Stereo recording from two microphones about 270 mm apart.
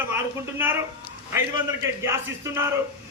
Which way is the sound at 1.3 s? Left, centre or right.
Centre.